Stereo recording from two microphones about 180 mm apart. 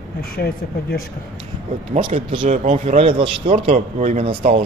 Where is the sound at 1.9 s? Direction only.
35° right (ahead or behind).